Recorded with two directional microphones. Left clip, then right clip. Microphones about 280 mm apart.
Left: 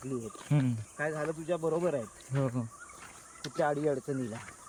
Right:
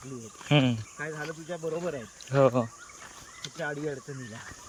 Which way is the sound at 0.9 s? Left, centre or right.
Left.